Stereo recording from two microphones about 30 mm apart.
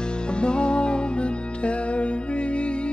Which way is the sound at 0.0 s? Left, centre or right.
Left.